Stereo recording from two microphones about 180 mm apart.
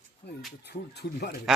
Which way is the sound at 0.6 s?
65° left (ahead or behind).